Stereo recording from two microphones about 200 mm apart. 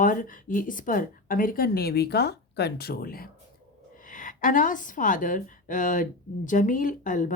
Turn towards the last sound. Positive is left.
turn(degrees=40)  # may be behind; listen again after turning